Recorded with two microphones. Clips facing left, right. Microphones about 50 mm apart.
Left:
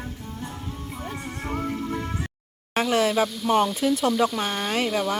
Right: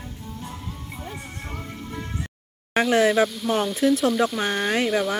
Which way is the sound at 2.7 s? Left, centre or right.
Centre.